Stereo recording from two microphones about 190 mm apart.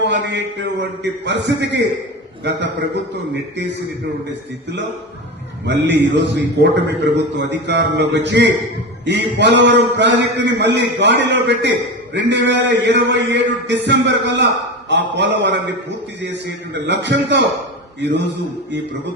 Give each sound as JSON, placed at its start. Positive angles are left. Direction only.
{"t": 0.0, "sound": "a man's voice", "side_deg": -70}
{"t": 5.6, "sound": "a man's voice", "side_deg": -70}